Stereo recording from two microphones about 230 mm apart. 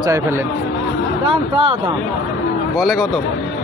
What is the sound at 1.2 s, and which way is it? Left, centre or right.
Speech, right.